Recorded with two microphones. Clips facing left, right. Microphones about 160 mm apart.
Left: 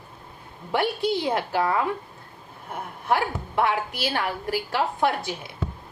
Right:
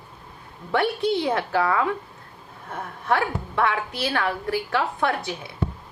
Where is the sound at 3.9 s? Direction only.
25° right (ahead or behind).